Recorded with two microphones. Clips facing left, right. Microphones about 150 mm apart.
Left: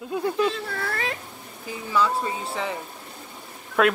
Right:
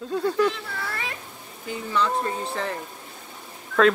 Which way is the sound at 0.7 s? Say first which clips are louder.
Left 3 dB; 50° left (ahead or behind).